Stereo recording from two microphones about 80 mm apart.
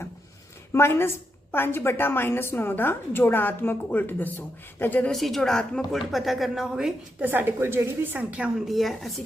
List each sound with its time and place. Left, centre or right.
0.7 s a woman's voice: left
5.1 s speech: centre
7.2 s a woman's voice: right
8.5 s speech: centre